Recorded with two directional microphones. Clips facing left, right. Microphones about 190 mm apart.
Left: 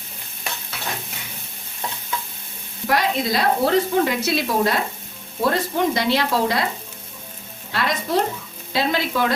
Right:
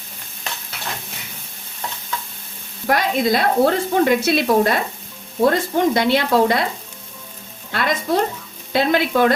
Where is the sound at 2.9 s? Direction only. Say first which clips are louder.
Right 3 dB; 55° right (ahead or behind).